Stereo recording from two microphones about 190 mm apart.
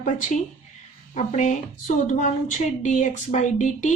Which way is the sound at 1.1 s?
40° left (ahead or behind).